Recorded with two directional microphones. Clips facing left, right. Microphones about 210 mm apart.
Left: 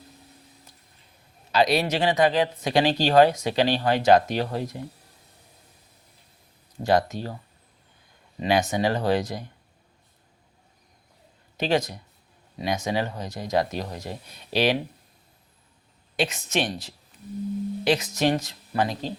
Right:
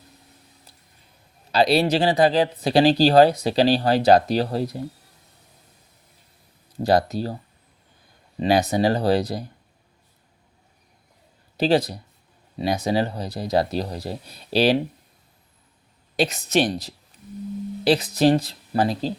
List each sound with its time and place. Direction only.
1.5 s speech: 30° right (ahead or behind)
6.8 s speech: 35° right (ahead or behind)
8.4 s speech: 35° right (ahead or behind)
11.5 s speech: 35° right (ahead or behind)
16.1 s speech: 35° right (ahead or behind)